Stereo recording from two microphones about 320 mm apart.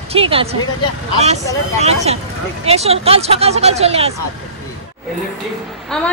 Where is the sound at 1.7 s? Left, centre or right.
Centre.